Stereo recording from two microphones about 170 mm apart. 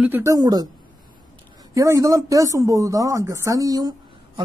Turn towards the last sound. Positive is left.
turn(degrees=-25)  # may be behind; listen again after turning